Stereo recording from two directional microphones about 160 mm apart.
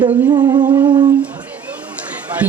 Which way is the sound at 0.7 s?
30° right (ahead or behind).